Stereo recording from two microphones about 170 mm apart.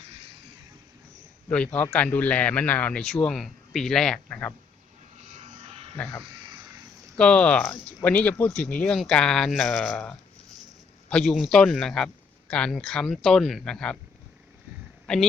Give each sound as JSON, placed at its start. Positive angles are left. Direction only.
{"t": 1.5, "sound": "a man's voice", "side_deg": 10}
{"t": 5.1, "sound": "electric shaver", "side_deg": -45}
{"t": 7.2, "sound": "a man's voice", "side_deg": 5}
{"t": 15.0, "sound": "a man's voice", "side_deg": 5}